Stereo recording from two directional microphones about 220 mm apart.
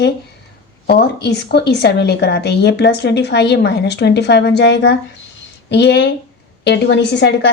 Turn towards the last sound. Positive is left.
turn(degrees=50)  # may be behind; listen again after turning